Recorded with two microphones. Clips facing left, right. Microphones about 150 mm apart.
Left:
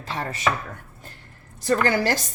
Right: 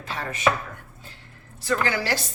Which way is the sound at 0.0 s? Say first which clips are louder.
Left 2 dB; 35° left (ahead or behind).